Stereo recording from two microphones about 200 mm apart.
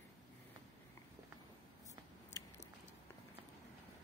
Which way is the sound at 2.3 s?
15° left (ahead or behind).